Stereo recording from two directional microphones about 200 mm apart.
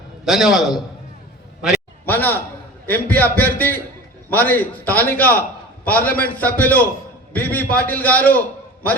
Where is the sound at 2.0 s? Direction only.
10° left (ahead or behind).